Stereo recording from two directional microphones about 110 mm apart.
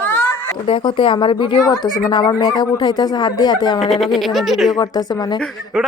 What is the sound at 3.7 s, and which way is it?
Speech, centre (ahead or behind).